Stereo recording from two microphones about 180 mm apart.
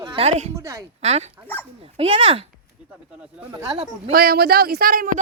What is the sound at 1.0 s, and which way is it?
Speech, 35° right (ahead or behind).